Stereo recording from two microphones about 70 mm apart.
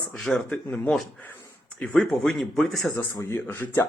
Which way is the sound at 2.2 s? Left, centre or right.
Centre.